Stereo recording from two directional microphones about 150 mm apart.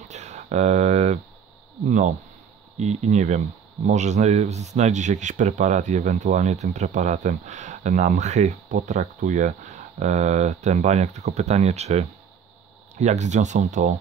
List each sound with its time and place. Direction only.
0.1 s speech: 50° right (ahead or behind)